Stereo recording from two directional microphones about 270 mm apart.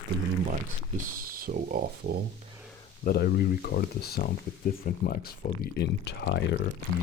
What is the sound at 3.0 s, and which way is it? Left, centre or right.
Speech, left.